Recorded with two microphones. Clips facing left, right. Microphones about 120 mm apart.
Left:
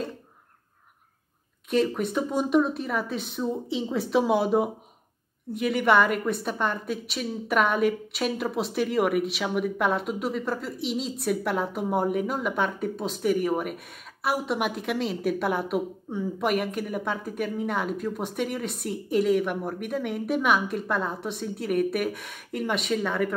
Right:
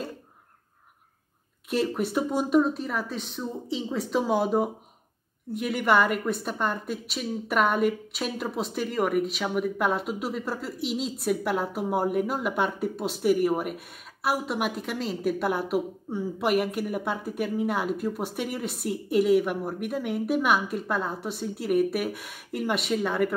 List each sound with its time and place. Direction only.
1.7 s a woman's voice: 5° right (ahead or behind)